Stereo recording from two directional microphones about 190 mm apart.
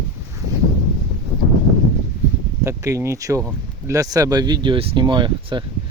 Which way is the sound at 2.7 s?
15° right (ahead or behind).